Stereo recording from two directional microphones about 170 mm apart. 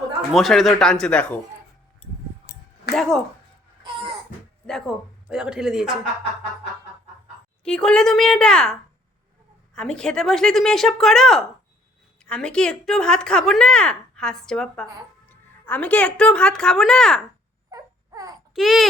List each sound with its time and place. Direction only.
0.3 s a woman's voice: centre (ahead or behind)
2.9 s a woman's voice: centre (ahead or behind)
4.6 s a woman's voice: centre (ahead or behind)
7.6 s a woman's voice: 5° left (ahead or behind)
17.7 s baby cry: 20° right (ahead or behind)
18.5 s a woman's voice: centre (ahead or behind)